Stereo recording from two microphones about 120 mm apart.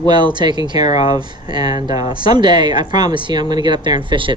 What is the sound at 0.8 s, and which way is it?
Speech, 55° left (ahead or behind).